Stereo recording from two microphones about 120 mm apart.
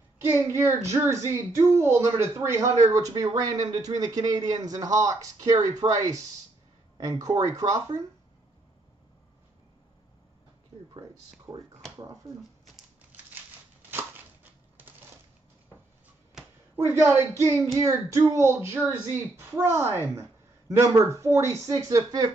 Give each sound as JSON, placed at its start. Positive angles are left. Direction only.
{"t": 0.2, "sound": "speech", "side_deg": -20}
{"t": 11.5, "sound": "speech", "side_deg": -45}
{"t": 13.8, "sound": "a sound", "side_deg": -15}
{"t": 16.7, "sound": "a woman's voice", "side_deg": -20}